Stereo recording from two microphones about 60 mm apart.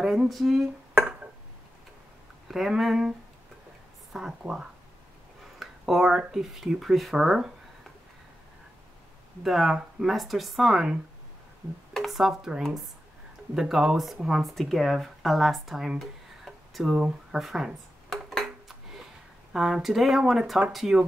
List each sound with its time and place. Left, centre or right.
0.0 s speech: centre
0.9 s a sound: right
2.4 s speech: centre
4.4 s speech: centre
9.4 s speech: centre
11.9 s speech: centre
16.0 s a sound: centre
16.9 s speech: centre
18.3 s a sound: centre
19.5 s speech: centre